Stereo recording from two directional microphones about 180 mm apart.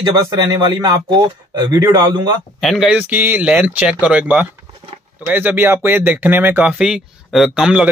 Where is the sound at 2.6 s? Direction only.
Centre (ahead or behind).